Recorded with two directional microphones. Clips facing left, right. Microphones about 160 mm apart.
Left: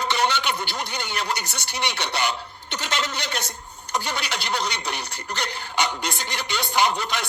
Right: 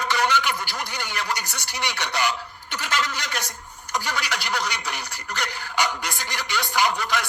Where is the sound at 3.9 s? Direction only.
30° left (ahead or behind).